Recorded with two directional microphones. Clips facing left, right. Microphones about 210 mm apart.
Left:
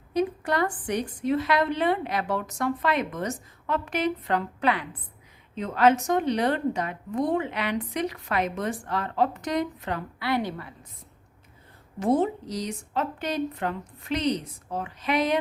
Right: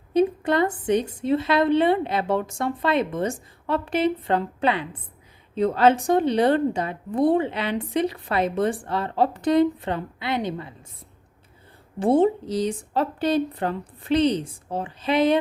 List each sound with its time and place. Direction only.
0.1 s a woman's voice: 25° right (ahead or behind)
11.9 s a woman's voice: 30° right (ahead or behind)